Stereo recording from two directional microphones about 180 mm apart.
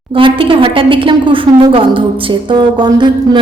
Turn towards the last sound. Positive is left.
turn(degrees=-25)  # may be behind; listen again after turning